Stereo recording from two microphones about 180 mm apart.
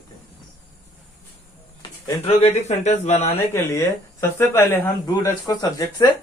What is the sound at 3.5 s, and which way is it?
Speech, 15° left (ahead or behind).